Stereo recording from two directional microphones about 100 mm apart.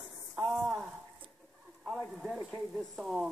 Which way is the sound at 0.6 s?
5° right (ahead or behind).